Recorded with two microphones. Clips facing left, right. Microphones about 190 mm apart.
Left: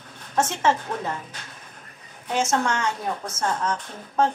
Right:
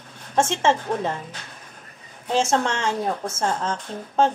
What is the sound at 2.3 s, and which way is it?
A woman's voice, 30° right (ahead or behind).